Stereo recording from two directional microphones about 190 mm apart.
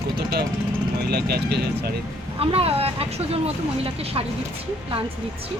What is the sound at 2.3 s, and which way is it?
Speech, 30° right (ahead or behind).